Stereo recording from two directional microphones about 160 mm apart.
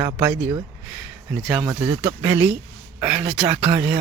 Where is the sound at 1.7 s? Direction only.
30° right (ahead or behind).